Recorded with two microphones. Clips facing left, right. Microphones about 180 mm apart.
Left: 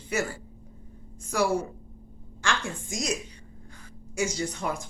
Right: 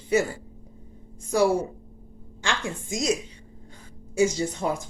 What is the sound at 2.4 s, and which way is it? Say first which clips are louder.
Speech: right 1 dB; 20° right (ahead or behind).